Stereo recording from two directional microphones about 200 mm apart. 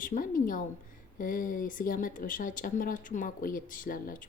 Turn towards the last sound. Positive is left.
turn(degrees=45)  # may be behind; listen again after turning